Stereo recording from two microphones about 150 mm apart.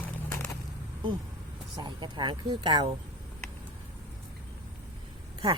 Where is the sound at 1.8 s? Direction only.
30° right (ahead or behind).